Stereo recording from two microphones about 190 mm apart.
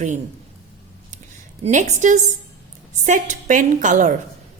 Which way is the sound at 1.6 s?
40° right (ahead or behind).